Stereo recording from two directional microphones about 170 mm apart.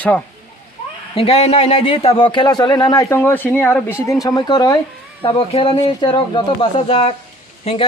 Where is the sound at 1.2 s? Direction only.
40° left (ahead or behind); by 4.2 s 10° left (ahead or behind).